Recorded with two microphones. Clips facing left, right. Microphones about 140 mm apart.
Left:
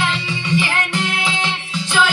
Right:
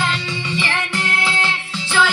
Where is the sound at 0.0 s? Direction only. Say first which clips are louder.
Left 1 dB; 10° left (ahead or behind).